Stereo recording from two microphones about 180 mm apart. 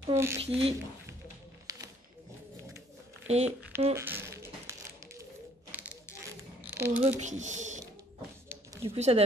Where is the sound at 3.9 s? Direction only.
15° right (ahead or behind).